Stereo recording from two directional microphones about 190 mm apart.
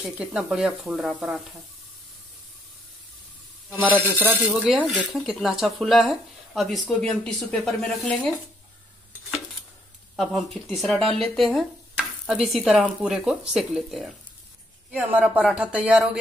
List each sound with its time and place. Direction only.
0.0 s speech: 5° right (ahead or behind)
4.2 s speech: 10° right (ahead or behind)
10.1 s speech: centre (ahead or behind)
11.3 s a sound: centre (ahead or behind)
12.5 s speech: centre (ahead or behind)